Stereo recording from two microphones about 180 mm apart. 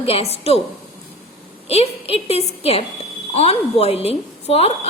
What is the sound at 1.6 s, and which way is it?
A woman's voice, 35° left (ahead or behind).